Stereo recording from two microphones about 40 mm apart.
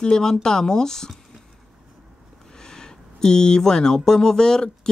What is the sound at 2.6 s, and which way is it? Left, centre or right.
Speech, centre.